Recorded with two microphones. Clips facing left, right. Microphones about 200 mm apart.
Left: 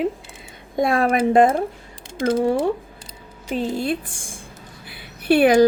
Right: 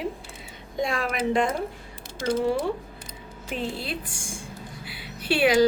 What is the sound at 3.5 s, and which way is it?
Speech, 40° left (ahead or behind).